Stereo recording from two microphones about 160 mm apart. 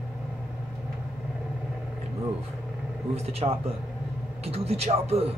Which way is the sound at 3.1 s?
40° right (ahead or behind).